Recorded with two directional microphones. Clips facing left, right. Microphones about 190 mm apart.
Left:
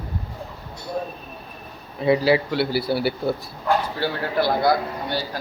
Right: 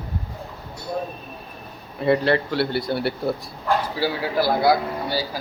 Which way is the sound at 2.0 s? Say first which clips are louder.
Left 1 dB; 5° left (ahead or behind).